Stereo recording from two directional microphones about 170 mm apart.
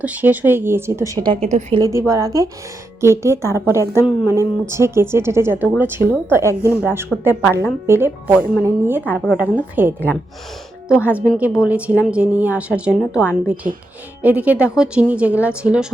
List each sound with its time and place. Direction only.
0.0 s a woman's voice: 10° right (ahead or behind)
9.1 s a woman's voice: 5° left (ahead or behind)
9.8 s a woman's voice: 10° right (ahead or behind)
11.1 s a woman's voice: 10° right (ahead or behind)